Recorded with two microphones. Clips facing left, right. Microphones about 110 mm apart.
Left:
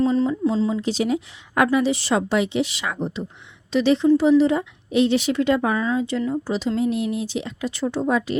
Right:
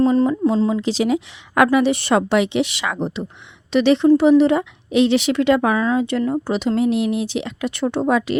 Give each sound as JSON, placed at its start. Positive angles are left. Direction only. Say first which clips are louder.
{"t": 0.0, "sound": "speech", "louder": "right 4 dB", "side_deg": -60}
{"t": 0.8, "sound": "a woman's voice", "louder": "right 3 dB", "side_deg": -90}
{"t": 3.7, "sound": "a woman's voice", "louder": "right 3 dB", "side_deg": -65}